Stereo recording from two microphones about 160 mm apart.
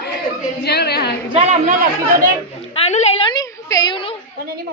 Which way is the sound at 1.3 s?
40° right (ahead or behind).